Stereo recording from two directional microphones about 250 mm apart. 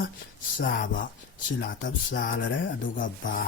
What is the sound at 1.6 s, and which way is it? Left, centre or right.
Music, left.